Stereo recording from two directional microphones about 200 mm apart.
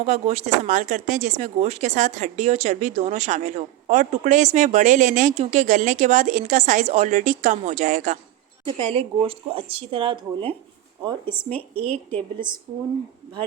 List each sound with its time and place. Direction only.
0.0 s speech: 35° right (ahead or behind)
8.6 s speech: 30° right (ahead or behind)
11.3 s speech: 10° left (ahead or behind)
12.7 s speech: 25° right (ahead or behind)